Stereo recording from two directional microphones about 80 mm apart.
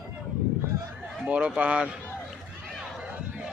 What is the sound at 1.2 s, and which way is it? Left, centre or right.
Speech, centre.